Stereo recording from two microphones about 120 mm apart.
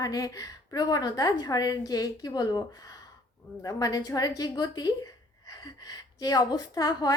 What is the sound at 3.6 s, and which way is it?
A woman's voice, 30° left (ahead or behind).